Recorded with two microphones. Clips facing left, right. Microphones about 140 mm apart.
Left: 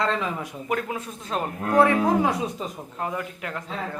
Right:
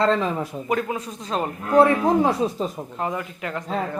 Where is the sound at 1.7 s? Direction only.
25° right (ahead or behind).